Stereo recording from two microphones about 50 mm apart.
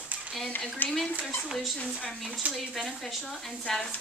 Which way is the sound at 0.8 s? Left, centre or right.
Left.